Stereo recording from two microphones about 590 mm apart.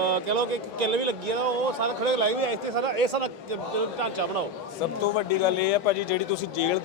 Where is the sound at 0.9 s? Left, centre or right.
Right.